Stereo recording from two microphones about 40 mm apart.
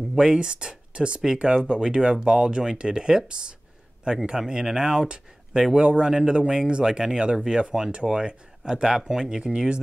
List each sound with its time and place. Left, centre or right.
0.2 s speech: right